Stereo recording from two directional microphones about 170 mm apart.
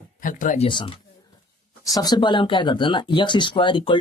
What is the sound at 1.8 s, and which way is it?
Speech, 20° left (ahead or behind).